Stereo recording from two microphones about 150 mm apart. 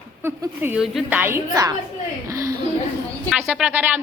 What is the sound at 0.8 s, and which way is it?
Speech, 5° right (ahead or behind).